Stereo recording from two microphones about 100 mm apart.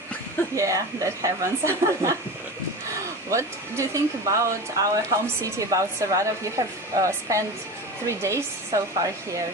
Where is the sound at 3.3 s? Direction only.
30° right (ahead or behind).